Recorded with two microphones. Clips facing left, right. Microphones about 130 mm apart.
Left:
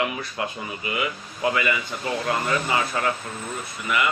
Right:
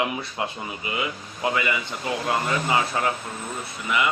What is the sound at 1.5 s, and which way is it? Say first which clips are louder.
Speech: left 1 dB; 20° right (ahead or behind).